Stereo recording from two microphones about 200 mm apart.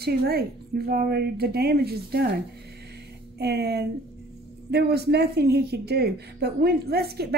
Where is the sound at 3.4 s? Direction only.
55° right (ahead or behind).